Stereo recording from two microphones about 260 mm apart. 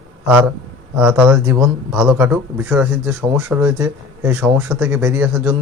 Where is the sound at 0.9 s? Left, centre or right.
Centre.